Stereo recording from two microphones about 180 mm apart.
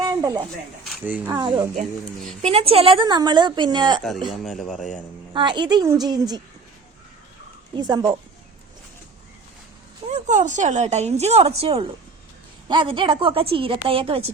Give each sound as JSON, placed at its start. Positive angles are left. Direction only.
{"t": 0.0, "sound": "a sound", "side_deg": -20}
{"t": 0.9, "sound": "speech", "side_deg": -10}
{"t": 1.3, "sound": "a woman's voice", "side_deg": -25}
{"t": 4.3, "sound": "a man's voice", "side_deg": 0}
{"t": 5.3, "sound": "a woman's voice", "side_deg": -25}
{"t": 7.8, "sound": "a woman's voice", "side_deg": -20}
{"t": 10.1, "sound": "a woman's voice", "side_deg": -40}